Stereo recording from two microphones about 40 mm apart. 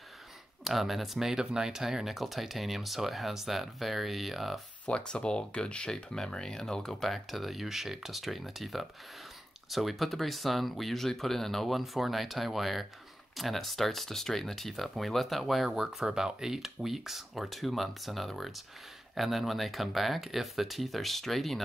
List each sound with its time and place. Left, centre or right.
0.7 s speech: centre
4.8 s speech: left; by 15.8 s centre
15.8 s speech: centre